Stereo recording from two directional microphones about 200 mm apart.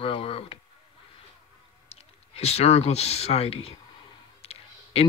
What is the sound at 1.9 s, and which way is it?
A man's voice, 30° left (ahead or behind).